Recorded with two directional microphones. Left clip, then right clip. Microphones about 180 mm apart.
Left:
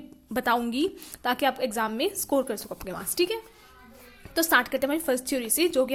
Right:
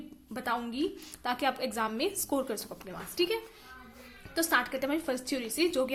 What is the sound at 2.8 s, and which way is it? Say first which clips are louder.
Speech: left 7 dB; 35° left (ahead or behind).